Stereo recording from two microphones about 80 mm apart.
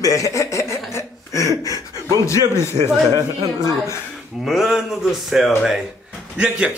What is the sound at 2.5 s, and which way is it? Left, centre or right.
A man's voice, left.